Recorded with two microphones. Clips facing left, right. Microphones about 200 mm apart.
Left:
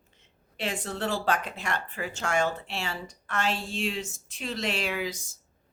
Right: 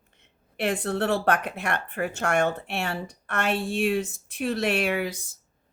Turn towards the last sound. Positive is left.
turn(degrees=-60)  # may be behind; listen again after turning